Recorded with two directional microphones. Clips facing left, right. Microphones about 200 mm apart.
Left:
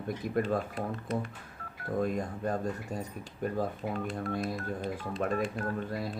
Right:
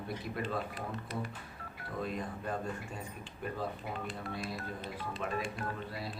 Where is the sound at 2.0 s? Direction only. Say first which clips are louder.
Left 6 dB; 45° left (ahead or behind).